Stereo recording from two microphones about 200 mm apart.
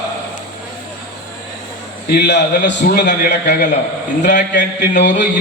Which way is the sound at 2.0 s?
55° left (ahead or behind).